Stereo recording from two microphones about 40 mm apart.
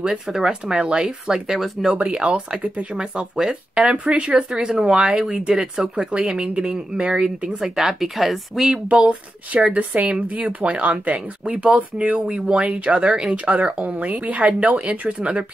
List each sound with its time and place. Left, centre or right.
0.4 s speech: centre
2.0 s speech: right
5.5 s speech: centre
7.6 s speech: centre
8.8 s speech: right
12.3 s speech: right
12.7 s speech: right
13.1 s speech: right
13.5 s speech: right